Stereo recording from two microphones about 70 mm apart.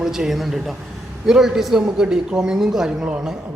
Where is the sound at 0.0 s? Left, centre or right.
Centre.